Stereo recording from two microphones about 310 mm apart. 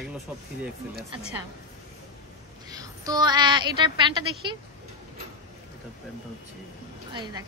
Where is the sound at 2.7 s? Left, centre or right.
Centre.